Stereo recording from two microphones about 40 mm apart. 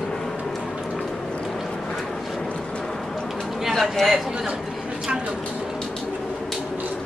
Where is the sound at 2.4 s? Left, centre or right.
Centre.